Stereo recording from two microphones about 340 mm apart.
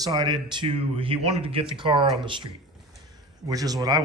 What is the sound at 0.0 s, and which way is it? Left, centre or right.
Speech, centre.